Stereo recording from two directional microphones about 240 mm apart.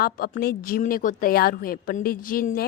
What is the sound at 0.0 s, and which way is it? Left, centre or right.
A woman's voice, left.